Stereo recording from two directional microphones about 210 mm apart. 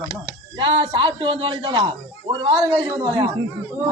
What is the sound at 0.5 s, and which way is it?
A man's voice, 25° right (ahead or behind).